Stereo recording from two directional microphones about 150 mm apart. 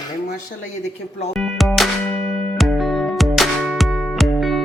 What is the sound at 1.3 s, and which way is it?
Music, centre (ahead or behind).